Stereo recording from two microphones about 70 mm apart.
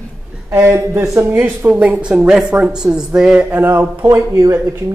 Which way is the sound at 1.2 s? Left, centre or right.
Right.